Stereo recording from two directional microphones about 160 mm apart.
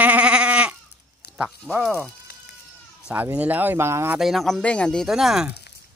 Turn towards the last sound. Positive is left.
turn(degrees=-5)  # may be behind; listen again after turning